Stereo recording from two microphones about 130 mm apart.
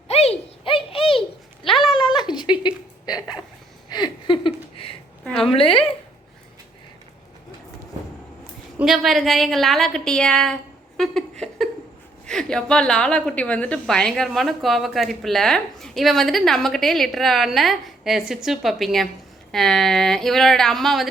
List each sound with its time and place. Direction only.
0.1 s a sound: 50° left (ahead or behind)
5.5 s speech: 45° left (ahead or behind)
8.8 s a woman's voice: centre (ahead or behind)